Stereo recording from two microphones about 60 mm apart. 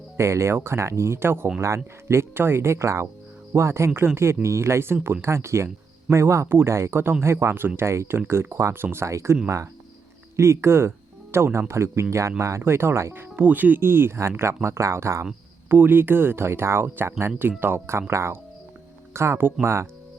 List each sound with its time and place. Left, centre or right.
0.2 s speech: right
8.8 s speech: right
9.0 s speech: right
13.1 s speech: right
15.7 s speech: right